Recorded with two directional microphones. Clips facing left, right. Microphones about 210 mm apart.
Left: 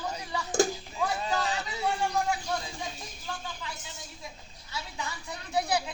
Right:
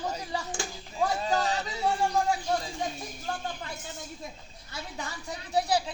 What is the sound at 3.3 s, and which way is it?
Speech, 50° right (ahead or behind).